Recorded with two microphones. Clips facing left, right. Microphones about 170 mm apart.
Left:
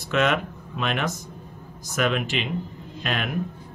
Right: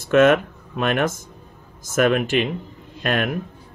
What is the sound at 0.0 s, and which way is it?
Speech, 50° right (ahead or behind).